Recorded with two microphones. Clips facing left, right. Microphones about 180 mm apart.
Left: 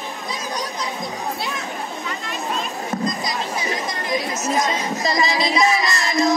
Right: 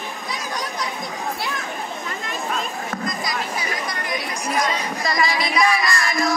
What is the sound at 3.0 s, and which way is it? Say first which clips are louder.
Chatter: left 1 dB; 20° left (ahead or behind).